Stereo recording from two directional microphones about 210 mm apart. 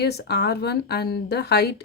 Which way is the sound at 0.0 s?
50° left (ahead or behind).